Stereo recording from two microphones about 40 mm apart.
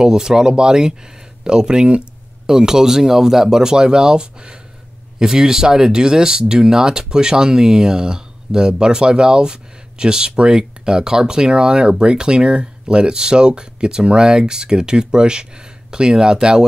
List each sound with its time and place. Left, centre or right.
0.0 s speech: centre
2.4 s speech: centre